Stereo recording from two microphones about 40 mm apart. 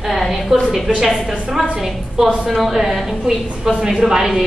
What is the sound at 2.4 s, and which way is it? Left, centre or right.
A woman's voice, centre.